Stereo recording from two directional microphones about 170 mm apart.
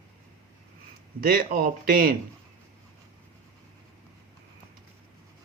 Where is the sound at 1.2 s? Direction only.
60° right (ahead or behind).